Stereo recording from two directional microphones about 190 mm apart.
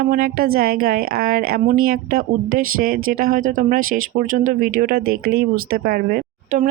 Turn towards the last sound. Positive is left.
turn(degrees=-45)  # may be behind; listen again after turning